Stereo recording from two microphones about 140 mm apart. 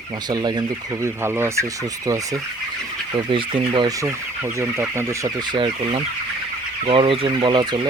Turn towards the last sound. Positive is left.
turn(degrees=-30)  # may be behind; listen again after turning